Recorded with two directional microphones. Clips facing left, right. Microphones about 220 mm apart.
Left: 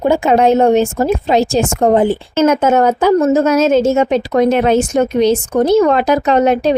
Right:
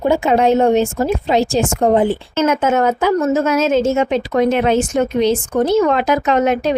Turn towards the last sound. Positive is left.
turn(degrees=35)  # may be behind; listen again after turning